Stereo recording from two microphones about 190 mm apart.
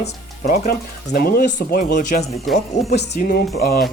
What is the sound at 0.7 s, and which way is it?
Speech, 55° left (ahead or behind).